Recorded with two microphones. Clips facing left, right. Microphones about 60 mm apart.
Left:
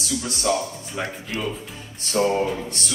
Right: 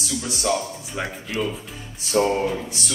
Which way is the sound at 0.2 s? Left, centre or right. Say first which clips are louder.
Even; centre.